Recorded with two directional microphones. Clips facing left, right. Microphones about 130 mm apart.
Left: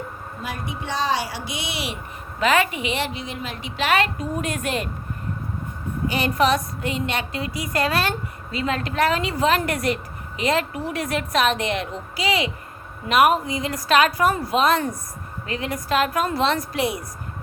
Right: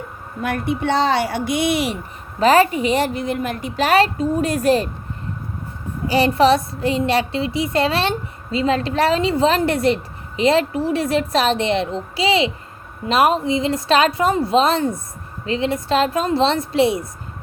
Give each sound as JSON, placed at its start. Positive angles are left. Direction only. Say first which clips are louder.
{"t": 0.4, "sound": "a woman's voice", "louder": "right 10 dB", "side_deg": -60}
{"t": 6.1, "sound": "a woman's voice", "louder": "right 6 dB", "side_deg": -30}